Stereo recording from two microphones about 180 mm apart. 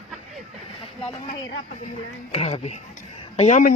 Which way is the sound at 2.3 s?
35° left (ahead or behind).